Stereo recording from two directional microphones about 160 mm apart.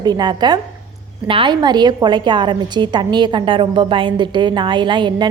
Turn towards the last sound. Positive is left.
turn(degrees=-30)  # may be behind; listen again after turning